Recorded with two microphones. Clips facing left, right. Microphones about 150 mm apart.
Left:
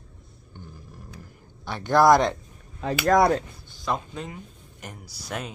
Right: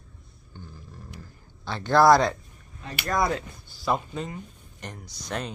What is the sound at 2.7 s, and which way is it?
Speech, 85° left.